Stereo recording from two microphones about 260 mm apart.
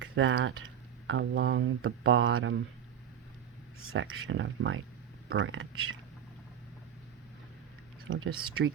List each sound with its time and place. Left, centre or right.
0.0 s speech: right
3.9 s speech: right
8.0 s speech: right